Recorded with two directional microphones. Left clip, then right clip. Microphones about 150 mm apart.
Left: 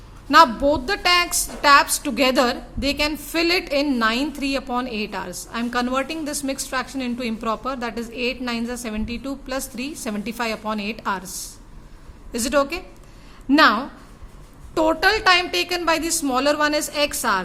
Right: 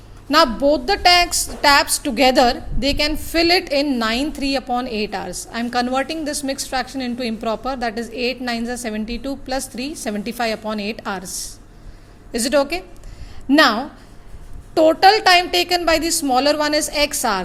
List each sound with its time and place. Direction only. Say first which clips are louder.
0.3 s a woman's voice: left 1 dB; 10° right (ahead or behind)
12.3 s a woman's voice: right 3 dB; 10° right (ahead or behind)